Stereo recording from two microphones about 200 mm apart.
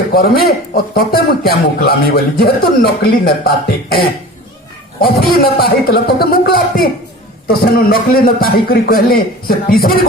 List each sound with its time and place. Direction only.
0.1 s speech: 50° left (ahead or behind)